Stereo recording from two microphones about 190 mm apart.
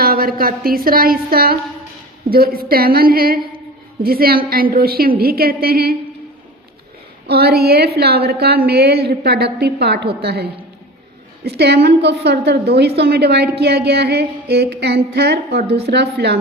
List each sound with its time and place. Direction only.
0.0 s a woman's voice: 50° right (ahead or behind)
7.3 s a woman's voice: 55° right (ahead or behind)